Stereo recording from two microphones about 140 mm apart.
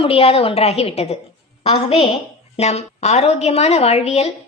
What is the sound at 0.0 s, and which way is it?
A woman's voice, 45° left (ahead or behind).